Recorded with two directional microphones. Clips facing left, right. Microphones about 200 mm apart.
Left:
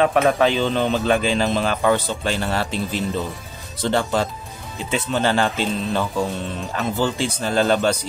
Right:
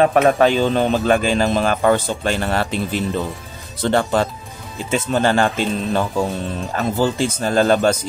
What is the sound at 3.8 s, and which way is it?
Speech, 55° right (ahead or behind).